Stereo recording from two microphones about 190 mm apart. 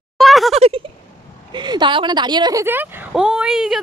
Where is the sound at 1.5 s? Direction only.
25° right (ahead or behind).